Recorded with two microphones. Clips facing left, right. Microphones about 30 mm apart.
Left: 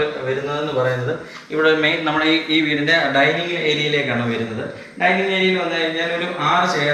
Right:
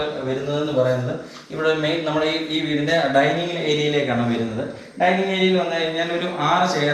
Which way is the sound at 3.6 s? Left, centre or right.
Centre.